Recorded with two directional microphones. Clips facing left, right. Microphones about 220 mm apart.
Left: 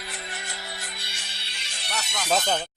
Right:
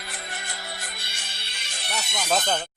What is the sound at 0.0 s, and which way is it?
Music, 50° right (ahead or behind).